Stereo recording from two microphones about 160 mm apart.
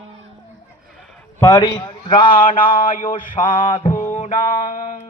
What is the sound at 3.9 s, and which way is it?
Music, 45° left (ahead or behind).